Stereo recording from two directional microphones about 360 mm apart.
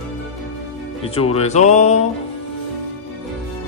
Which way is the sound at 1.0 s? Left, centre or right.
Centre.